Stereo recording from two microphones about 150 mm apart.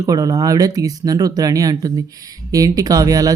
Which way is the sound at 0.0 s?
25° right (ahead or behind).